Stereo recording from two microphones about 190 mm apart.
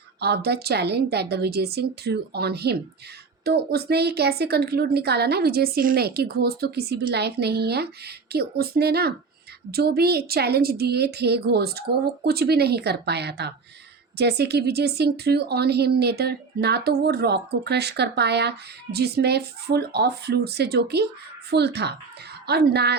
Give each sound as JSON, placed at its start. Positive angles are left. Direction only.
{"t": 0.2, "sound": "speech", "side_deg": -60}